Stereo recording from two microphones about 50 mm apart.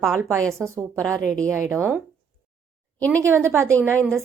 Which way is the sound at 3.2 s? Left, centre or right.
Right.